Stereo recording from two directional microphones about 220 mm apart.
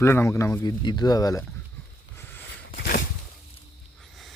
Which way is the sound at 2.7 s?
40° left (ahead or behind).